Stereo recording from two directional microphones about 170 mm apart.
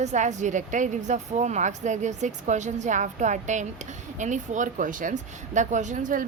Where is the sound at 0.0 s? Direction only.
45° right (ahead or behind).